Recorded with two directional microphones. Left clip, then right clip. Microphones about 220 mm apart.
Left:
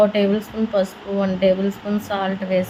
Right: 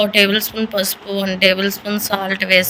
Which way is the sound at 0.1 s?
45° right (ahead or behind).